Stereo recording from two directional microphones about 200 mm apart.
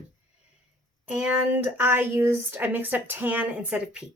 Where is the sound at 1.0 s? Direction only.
5° right (ahead or behind).